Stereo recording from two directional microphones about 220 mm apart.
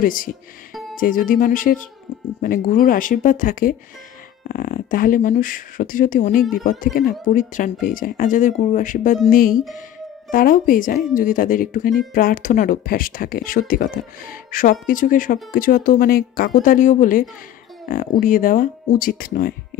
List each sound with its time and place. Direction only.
0.0 s speech: 40° left (ahead or behind)